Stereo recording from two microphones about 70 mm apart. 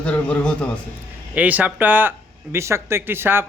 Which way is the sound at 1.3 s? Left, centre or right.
Right.